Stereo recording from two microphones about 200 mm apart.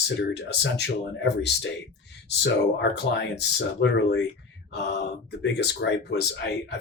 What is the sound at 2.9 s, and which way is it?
Speech, 60° left (ahead or behind).